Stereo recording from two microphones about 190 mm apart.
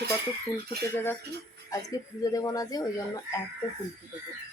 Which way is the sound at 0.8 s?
10° left (ahead or behind).